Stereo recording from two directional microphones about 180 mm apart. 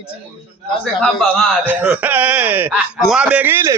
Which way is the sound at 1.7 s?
10° right (ahead or behind).